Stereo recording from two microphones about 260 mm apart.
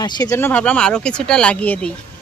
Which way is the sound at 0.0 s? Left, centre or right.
Centre.